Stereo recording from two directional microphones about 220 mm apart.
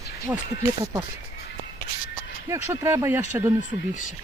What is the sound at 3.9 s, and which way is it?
Speech, 35° left (ahead or behind).